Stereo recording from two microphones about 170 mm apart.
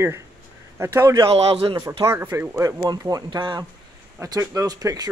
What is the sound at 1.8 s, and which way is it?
Speech, 15° right (ahead or behind).